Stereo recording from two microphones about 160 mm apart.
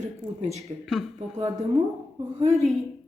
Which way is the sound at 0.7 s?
35° right (ahead or behind).